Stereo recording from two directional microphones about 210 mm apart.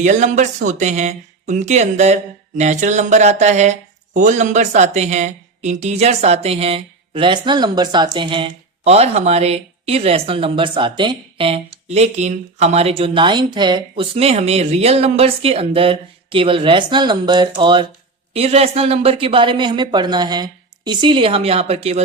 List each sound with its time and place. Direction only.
0.0 s speech: 35° right (ahead or behind)